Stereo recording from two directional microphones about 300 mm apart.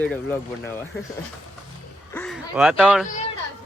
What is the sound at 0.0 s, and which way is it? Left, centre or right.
Speech, centre.